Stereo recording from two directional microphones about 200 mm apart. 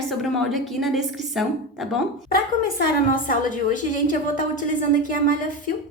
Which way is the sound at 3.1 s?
40° left (ahead or behind).